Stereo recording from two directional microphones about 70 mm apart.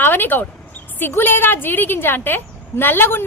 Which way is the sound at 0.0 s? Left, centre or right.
Left.